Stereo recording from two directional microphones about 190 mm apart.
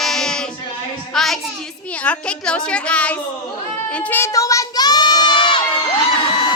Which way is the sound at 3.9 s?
10° left (ahead or behind).